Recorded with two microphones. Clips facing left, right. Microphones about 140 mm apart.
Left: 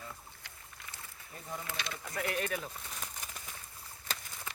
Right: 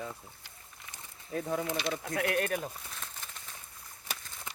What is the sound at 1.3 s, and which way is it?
Speech, 90° right.